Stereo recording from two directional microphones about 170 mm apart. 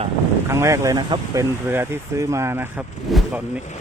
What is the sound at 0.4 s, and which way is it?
Speech, 15° right (ahead or behind).